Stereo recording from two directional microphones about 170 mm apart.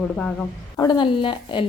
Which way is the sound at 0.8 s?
25° left (ahead or behind).